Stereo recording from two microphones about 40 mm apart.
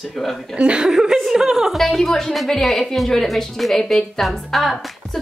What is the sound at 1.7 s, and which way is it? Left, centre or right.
A woman's voice, centre.